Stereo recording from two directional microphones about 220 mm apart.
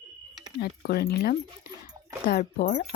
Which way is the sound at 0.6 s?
45° left (ahead or behind).